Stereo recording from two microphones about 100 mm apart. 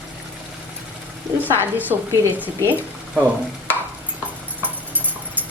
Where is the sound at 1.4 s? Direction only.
20° right (ahead or behind).